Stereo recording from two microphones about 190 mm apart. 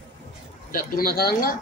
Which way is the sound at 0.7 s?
50° left (ahead or behind).